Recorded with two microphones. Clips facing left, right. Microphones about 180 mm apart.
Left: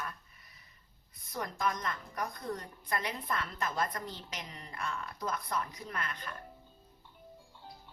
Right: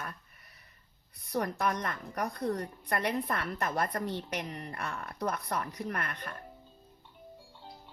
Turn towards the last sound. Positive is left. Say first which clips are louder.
# right 3 dB
turn(degrees=-60)  # may be behind; listen again after turning